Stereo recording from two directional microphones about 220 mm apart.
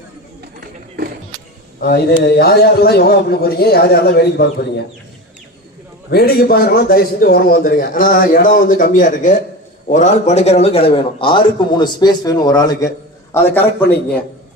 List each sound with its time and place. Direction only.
1.8 s a man's voice: 50° left (ahead or behind)
6.1 s a man's voice: 45° left (ahead or behind); by 13.9 s 10° left (ahead or behind)